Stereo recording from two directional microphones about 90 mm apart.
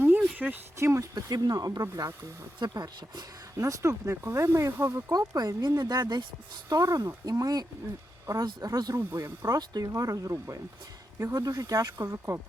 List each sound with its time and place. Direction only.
0.0 s a sound: 20° right (ahead or behind)
0.8 s speech: 30° right (ahead or behind)
1.1 s speech: 45° right (ahead or behind)
5.1 s speech: 45° right (ahead or behind)
6.7 s speech: 40° right (ahead or behind)
9.0 s speech: 30° right (ahead or behind)